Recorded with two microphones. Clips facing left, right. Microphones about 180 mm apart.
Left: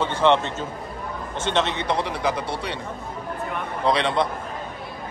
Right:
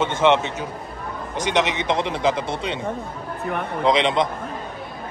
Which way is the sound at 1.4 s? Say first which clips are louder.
Right 2 dB; 15° right (ahead or behind).